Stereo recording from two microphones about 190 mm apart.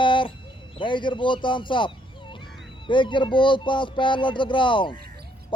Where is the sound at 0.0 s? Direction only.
25° left (ahead or behind).